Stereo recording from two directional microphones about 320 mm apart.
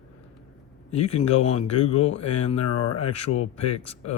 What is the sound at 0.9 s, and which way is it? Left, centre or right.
Speech, centre.